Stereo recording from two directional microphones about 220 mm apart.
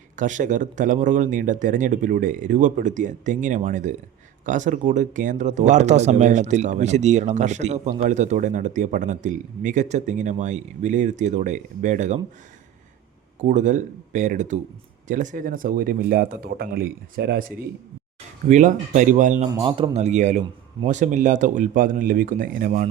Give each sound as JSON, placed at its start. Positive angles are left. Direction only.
{"t": 0.2, "sound": "speech", "side_deg": -35}
{"t": 13.5, "sound": "speech", "side_deg": -35}
{"t": 19.5, "sound": "speech", "side_deg": -25}